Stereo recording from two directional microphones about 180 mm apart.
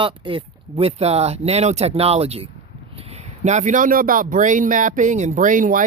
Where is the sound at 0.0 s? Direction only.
30° right (ahead or behind).